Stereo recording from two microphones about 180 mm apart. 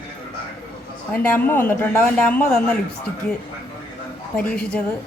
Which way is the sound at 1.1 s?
10° left (ahead or behind).